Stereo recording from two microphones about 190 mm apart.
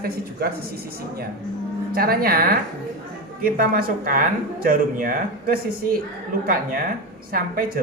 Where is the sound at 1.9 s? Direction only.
50° right (ahead or behind).